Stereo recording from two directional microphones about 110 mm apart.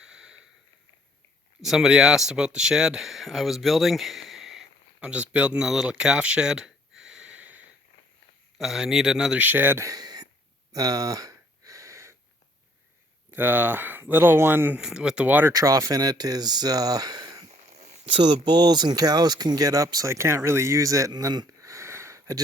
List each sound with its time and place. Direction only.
0.0 s sniff: 5° right (ahead or behind)
1.6 s speech: 5° right (ahead or behind)
9.8 s a sound: 35° right (ahead or behind)
13.3 s speech: 20° right (ahead or behind)
14.8 s speech: 5° right (ahead or behind)
15.5 s speech: 35° right (ahead or behind)
17.5 s a sound: 90° right
18.1 s speech: 45° right (ahead or behind); by 22.4 s 25° right (ahead or behind)